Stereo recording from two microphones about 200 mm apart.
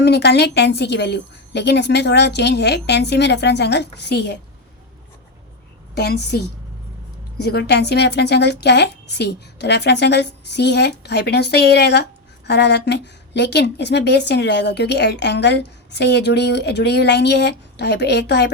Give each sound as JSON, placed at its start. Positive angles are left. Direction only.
{"t": 0.0, "sound": "speech", "side_deg": 55}
{"t": 6.0, "sound": "speech", "side_deg": 55}
{"t": 7.4, "sound": "speech", "side_deg": 55}